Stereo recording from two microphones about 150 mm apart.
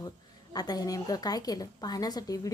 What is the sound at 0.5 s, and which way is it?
A woman's voice, 25° left (ahead or behind).